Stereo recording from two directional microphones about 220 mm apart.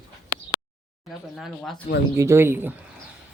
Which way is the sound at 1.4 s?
Centre (ahead or behind).